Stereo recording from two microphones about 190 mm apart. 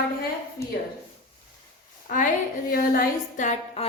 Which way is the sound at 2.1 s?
45° left (ahead or behind).